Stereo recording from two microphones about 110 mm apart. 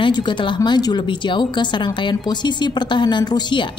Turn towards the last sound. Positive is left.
turn(degrees=45)  # may be behind; listen again after turning